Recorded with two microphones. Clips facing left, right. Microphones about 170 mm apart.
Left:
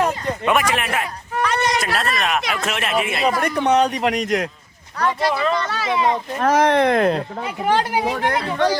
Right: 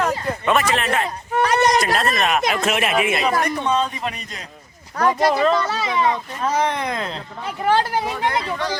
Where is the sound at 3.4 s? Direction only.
70° left (ahead or behind); by 4.5 s 90° left.